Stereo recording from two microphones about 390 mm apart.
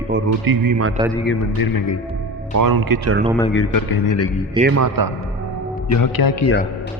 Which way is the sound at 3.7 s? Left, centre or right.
Left.